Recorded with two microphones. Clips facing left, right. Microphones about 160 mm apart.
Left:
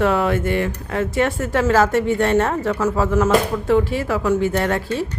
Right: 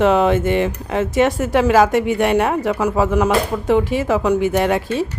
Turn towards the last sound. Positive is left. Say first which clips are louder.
# right 3 dB
turn(degrees=-15)  # may be behind; listen again after turning